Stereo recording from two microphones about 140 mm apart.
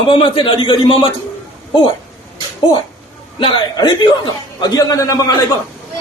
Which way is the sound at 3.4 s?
35° left (ahead or behind).